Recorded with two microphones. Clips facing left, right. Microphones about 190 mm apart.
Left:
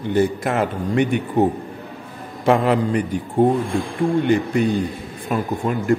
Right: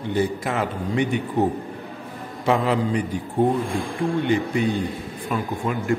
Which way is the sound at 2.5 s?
55° left (ahead or behind).